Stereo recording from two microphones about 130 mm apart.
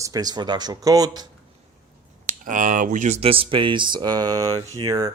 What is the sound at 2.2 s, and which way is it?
Speech, 85° right.